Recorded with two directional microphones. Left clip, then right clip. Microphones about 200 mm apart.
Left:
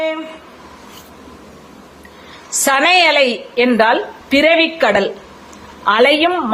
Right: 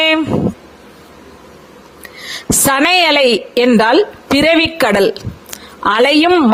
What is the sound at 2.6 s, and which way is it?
A woman's voice, 60° right (ahead or behind).